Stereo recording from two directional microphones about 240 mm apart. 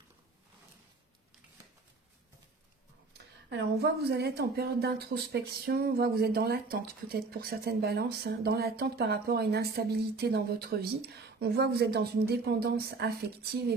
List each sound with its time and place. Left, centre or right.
3.4 s a woman's voice: right